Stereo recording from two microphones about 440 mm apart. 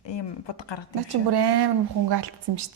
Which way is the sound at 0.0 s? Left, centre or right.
Left.